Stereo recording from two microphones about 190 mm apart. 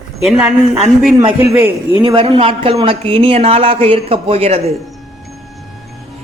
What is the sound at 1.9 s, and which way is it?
A woman's voice, 30° right (ahead or behind).